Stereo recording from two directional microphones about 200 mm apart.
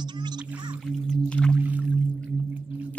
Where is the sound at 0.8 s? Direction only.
Centre (ahead or behind).